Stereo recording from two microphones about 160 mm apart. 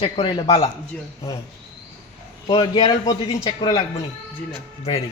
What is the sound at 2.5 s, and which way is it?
A man's voice, 30° left (ahead or behind).